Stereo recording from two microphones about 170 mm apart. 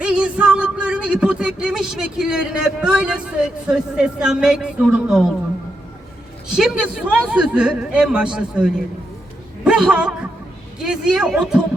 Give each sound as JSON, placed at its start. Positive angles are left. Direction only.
{"t": 0.0, "sound": "music", "side_deg": -5}
{"t": 6.5, "sound": "a man's voice", "side_deg": -5}